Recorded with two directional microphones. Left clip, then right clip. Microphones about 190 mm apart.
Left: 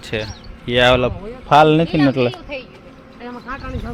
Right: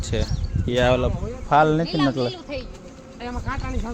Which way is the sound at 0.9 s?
15° left (ahead or behind).